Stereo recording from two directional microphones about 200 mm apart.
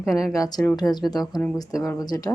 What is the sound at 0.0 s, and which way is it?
Speech, centre (ahead or behind).